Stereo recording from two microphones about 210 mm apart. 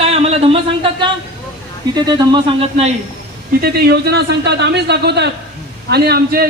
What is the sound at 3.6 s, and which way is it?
A man's voice, 50° right (ahead or behind).